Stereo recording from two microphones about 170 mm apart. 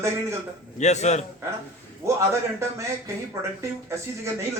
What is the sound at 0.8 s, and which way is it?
Speech, 40° left (ahead or behind).